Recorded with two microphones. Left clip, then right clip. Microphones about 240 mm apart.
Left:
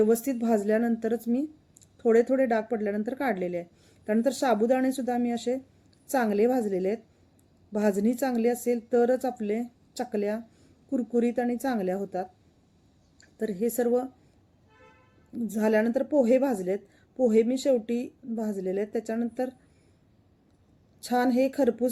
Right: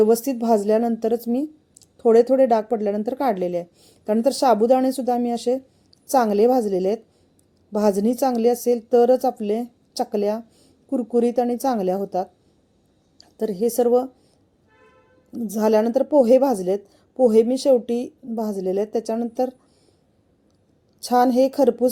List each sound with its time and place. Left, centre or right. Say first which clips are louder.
0.1 s speech: right 7 dB; centre
13.3 s speech: right 7 dB; centre
15.7 s a woman's voice: right 7 dB; centre
21.0 s a woman's voice: right 9 dB; right
21.2 s speech: right 7 dB; centre